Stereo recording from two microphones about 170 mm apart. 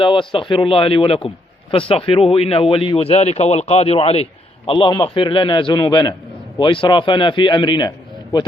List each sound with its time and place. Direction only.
0.0 s a man's voice: 30° left (ahead or behind)